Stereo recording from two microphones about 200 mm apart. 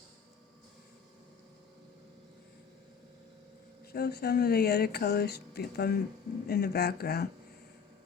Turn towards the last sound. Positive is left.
turn(degrees=50)  # may be behind; listen again after turning